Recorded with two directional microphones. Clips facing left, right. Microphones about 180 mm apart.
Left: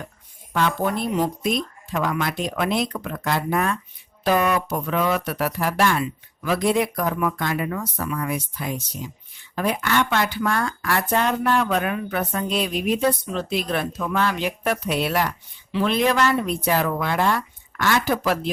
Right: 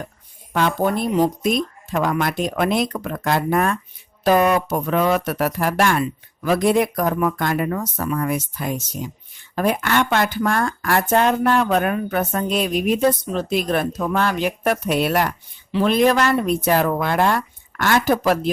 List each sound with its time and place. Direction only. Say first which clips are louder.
0.5 s speech: right 3 dB; 50° right (ahead or behind)
1.1 s speech: right 5 dB; 35° right (ahead or behind)
1.5 s speech: right 3 dB; 50° right (ahead or behind)